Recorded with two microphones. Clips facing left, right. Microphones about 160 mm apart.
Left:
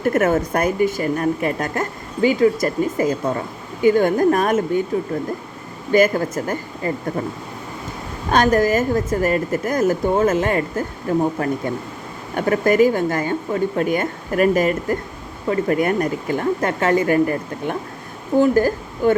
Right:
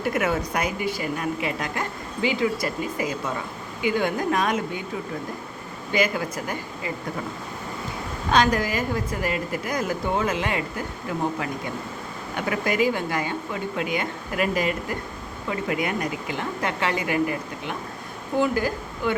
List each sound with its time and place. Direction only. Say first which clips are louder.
0.0 s a woman's voice: left 7 dB; 50° left (ahead or behind)
5.9 s a woman's voice: left 8 dB; 45° left (ahead or behind)
8.3 s a woman's voice: left 6 dB; 45° left (ahead or behind)
12.4 s a woman's voice: left 8 dB; 45° left (ahead or behind)